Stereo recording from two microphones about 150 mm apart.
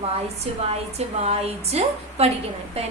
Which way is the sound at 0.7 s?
45° right (ahead or behind).